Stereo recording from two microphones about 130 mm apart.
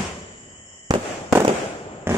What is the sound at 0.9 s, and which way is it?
Fireworks, 30° right (ahead or behind).